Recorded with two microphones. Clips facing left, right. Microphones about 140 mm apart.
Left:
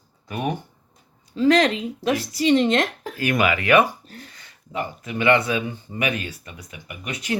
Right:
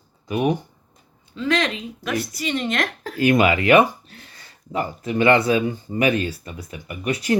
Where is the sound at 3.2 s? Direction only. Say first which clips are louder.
Right 5 dB; 25° right (ahead or behind).